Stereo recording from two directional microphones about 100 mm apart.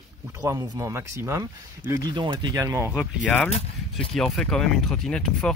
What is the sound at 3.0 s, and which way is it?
Speech, 15° left (ahead or behind).